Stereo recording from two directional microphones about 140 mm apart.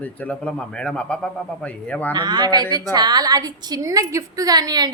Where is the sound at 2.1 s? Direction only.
30° right (ahead or behind).